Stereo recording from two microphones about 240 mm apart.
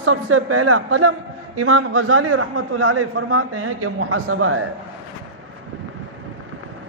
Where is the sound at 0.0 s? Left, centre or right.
Right.